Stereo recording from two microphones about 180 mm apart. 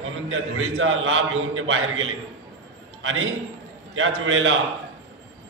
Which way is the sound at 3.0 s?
90° right.